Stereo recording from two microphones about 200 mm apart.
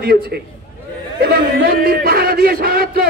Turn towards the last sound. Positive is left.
turn(degrees=-50)  # may be behind; listen again after turning